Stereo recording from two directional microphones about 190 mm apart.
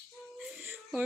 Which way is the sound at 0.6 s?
5° right (ahead or behind).